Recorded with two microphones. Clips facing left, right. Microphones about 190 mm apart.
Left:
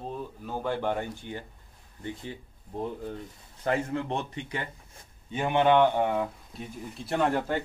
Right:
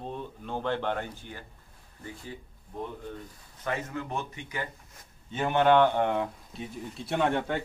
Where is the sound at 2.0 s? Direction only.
30° left (ahead or behind).